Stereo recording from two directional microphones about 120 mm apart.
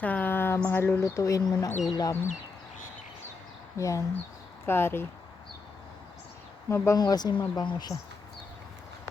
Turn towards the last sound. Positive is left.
turn(degrees=35)  # may be behind; listen again after turning